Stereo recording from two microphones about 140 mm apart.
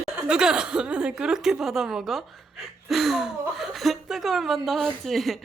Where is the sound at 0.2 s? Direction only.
5° right (ahead or behind).